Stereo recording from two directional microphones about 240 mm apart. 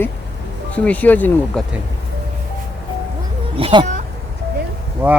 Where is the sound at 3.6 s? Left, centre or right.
Centre.